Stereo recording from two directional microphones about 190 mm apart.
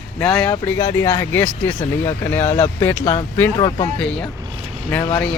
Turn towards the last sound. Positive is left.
turn(degrees=10)  # may be behind; listen again after turning